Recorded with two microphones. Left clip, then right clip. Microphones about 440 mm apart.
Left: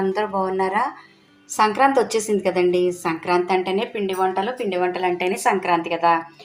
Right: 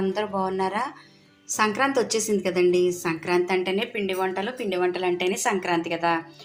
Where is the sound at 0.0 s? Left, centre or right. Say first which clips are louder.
Left 4 dB; right.